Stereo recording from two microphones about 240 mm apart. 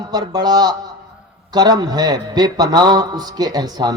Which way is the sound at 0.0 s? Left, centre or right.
Centre.